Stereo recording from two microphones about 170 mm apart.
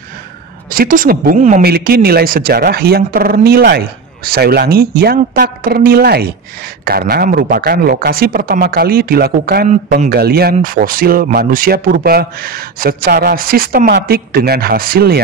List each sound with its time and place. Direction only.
0.7 s speech: 55° right (ahead or behind)
1.6 s speech: 65° right (ahead or behind)
9.7 s speech: 55° right (ahead or behind)